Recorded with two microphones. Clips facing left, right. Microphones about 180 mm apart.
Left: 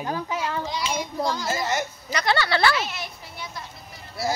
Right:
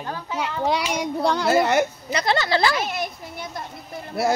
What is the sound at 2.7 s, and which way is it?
A woman's voice, 50° right (ahead or behind).